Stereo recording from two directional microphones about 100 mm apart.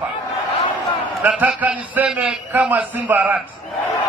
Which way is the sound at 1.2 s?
15° right (ahead or behind).